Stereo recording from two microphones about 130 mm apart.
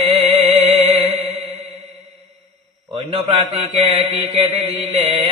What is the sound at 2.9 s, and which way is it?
Mantra, 50° right (ahead or behind).